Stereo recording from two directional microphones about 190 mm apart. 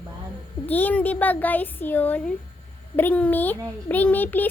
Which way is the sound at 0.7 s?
10° left (ahead or behind).